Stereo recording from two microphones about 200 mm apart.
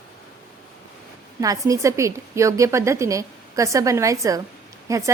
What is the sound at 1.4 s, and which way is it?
A woman's voice, 15° right (ahead or behind).